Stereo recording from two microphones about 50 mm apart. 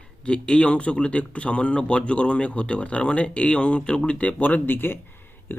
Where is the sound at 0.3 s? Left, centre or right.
Left.